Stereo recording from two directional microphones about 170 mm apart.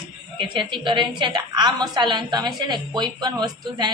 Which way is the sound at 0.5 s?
30° right (ahead or behind).